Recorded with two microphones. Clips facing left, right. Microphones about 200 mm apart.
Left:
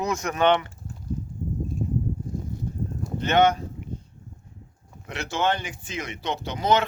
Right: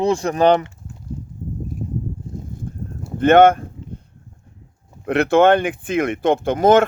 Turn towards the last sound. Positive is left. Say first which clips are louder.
# right 9 dB
turn(degrees=-50)  # may be behind; listen again after turning